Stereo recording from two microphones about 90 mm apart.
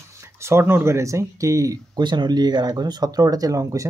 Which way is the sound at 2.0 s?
55° right (ahead or behind).